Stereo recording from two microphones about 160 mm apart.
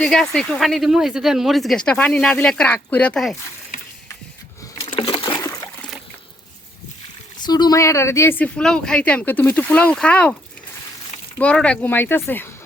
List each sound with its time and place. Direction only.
0.0 s speech: 5° left (ahead or behind)
4.8 s a sound: 35° left (ahead or behind)
7.4 s speech: 25° left (ahead or behind); by 10.3 s 10° left (ahead or behind)
11.3 s speech: 5° left (ahead or behind)